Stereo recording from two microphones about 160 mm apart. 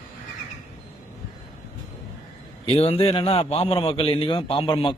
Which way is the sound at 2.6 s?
40° left (ahead or behind).